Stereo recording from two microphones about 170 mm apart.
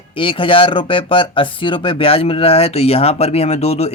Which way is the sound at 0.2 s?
30° left (ahead or behind).